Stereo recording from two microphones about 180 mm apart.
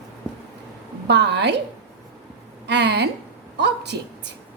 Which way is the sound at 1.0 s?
70° right (ahead or behind).